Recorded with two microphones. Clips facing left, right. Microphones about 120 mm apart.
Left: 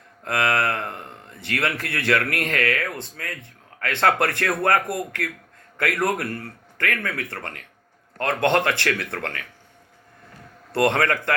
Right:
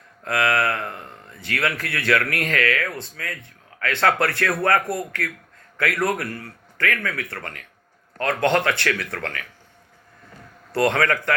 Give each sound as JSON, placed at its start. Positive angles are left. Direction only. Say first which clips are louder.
{"t": 0.3, "sound": "a man's voice", "louder": "right 1 dB", "side_deg": 25}
{"t": 5.7, "sound": "a man's voice", "louder": "even", "side_deg": 20}
{"t": 10.7, "sound": "a man's voice", "louder": "even", "side_deg": 25}